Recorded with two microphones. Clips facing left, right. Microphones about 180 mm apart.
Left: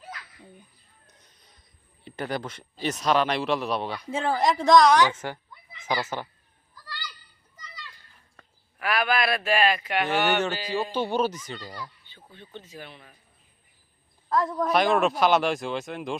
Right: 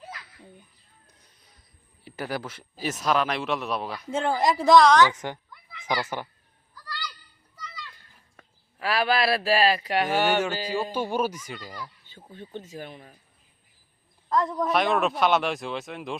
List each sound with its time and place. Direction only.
1.0 s mechanisms: 10° right (ahead or behind)
2.0 s speech: 5° right (ahead or behind)
5.1 s speech: 15° right (ahead or behind)
8.8 s speech: 30° right (ahead or behind)
10.1 s speech: 10° right (ahead or behind)
12.0 s speech: 45° right (ahead or behind)
14.3 s speech: 5° left (ahead or behind)